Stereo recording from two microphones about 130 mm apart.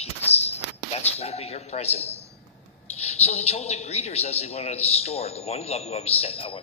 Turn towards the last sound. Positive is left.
turn(degrees=45)  # may be behind; listen again after turning